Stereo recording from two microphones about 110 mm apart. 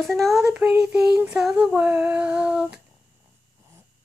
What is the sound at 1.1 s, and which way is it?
Female singing, 15° right (ahead or behind).